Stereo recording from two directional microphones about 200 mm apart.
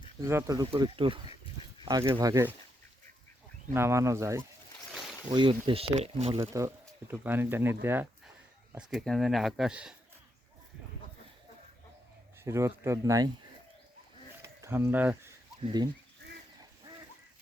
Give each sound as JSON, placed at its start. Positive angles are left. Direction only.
{"t": 0.2, "sound": "speech", "side_deg": -15}
{"t": 3.8, "sound": "speech", "side_deg": -15}
{"t": 6.4, "sound": "speech", "side_deg": -15}
{"t": 8.9, "sound": "speech", "side_deg": 0}
{"t": 12.5, "sound": "speech", "side_deg": -15}
{"t": 14.4, "sound": "a sound", "side_deg": -15}